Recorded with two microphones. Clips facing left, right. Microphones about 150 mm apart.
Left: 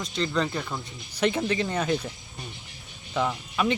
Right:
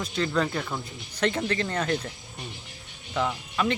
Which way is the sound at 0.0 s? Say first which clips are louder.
Right 1 dB; 5° right (ahead or behind).